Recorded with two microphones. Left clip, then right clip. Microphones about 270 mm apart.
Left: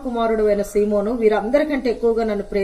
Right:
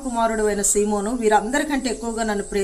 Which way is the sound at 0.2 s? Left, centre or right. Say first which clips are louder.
Left 3 dB; centre.